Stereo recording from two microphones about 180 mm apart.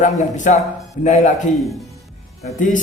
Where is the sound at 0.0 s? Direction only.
45° left (ahead or behind).